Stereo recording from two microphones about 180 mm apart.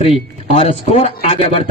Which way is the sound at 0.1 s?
35° left (ahead or behind).